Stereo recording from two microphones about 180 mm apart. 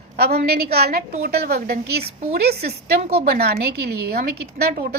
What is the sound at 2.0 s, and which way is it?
Speech, 35° right (ahead or behind).